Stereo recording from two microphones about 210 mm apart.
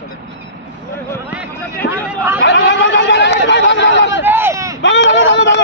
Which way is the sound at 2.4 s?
60° left (ahead or behind).